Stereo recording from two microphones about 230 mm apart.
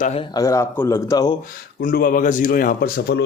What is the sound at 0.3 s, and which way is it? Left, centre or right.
Speech, centre.